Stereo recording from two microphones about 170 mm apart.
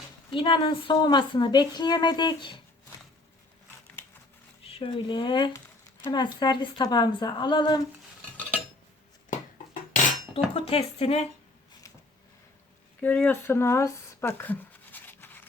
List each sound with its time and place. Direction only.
0.3 s a woman's voice: 30° left (ahead or behind)
4.6 s a woman's voice: 35° left (ahead or behind)
9.9 s dishes: 35° left (ahead or behind)
13.0 s a sound: 10° left (ahead or behind)